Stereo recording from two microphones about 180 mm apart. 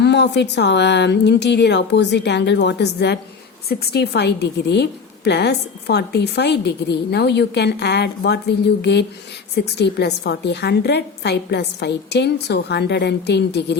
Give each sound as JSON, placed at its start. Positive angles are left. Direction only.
{"t": 0.0, "sound": "a woman's voice", "side_deg": 75}